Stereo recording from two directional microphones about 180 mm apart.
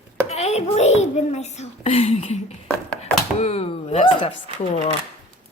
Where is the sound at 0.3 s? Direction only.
35° left (ahead or behind).